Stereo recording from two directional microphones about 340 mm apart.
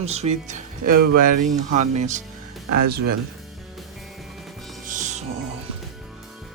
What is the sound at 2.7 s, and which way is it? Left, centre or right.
Speech, right.